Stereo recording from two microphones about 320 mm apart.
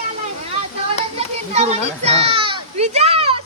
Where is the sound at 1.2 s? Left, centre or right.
Centre.